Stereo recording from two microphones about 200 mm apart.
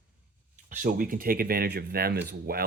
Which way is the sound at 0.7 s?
45° right (ahead or behind).